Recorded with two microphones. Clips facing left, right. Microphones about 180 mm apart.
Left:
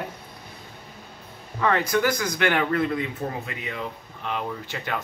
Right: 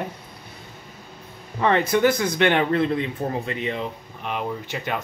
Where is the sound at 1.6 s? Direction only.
25° right (ahead or behind).